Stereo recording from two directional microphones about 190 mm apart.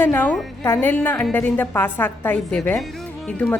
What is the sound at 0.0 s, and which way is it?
A woman's voice, 10° left (ahead or behind).